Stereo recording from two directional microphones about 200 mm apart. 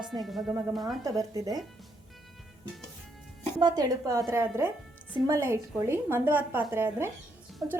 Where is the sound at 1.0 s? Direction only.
15° right (ahead or behind).